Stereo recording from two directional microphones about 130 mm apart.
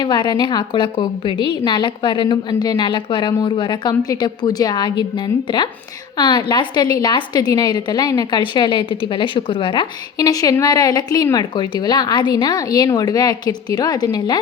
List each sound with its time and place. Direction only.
0.0 s a woman's voice: 35° left (ahead or behind)